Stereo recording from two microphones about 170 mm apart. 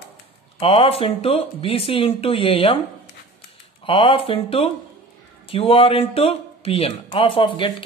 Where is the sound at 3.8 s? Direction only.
30° left (ahead or behind).